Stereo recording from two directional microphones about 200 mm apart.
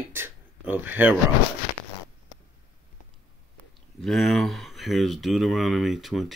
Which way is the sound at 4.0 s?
Centre (ahead or behind).